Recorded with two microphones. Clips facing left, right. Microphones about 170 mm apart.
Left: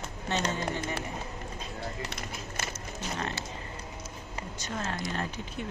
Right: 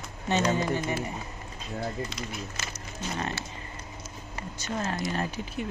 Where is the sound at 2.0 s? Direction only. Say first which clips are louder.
Right 3 dB; 55° left (ahead or behind).